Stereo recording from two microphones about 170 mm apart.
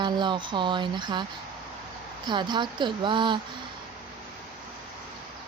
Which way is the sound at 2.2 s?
25° right (ahead or behind).